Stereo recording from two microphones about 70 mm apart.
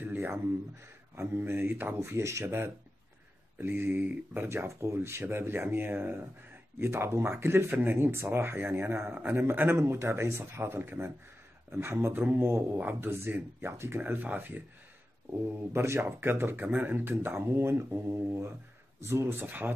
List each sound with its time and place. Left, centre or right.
0.0 s a sound: right
1.1 s speech: right
4.5 s speech: right
15.5 s speech: right
19.4 s speech: right